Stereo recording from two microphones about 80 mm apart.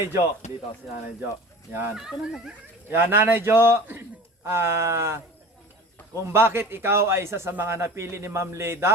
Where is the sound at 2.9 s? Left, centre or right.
Right.